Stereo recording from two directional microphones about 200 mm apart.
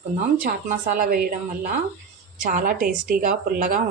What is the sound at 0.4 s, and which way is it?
Speech, 45° right (ahead or behind).